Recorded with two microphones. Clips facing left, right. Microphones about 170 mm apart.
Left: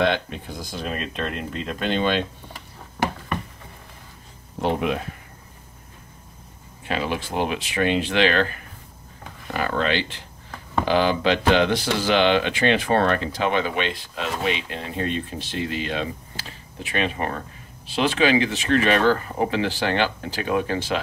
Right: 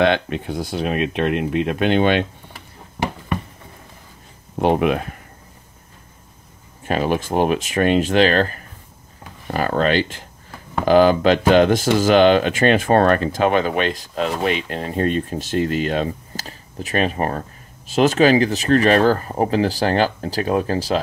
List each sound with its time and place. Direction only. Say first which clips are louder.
0.0 s speech: right 5 dB; 65° right (ahead or behind)
4.6 s speech: right 6 dB; 60° right (ahead or behind)
6.9 s speech: right 6 dB; 45° right (ahead or behind)